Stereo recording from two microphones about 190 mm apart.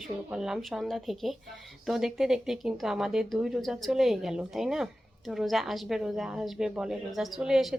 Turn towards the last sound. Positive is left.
turn(degrees=0)  # may be behind; listen again after turning